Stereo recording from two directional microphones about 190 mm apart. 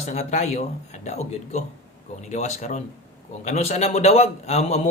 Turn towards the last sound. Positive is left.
turn(degrees=35)  # may be behind; listen again after turning